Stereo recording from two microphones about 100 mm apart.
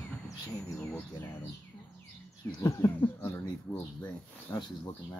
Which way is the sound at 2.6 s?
35° left (ahead or behind).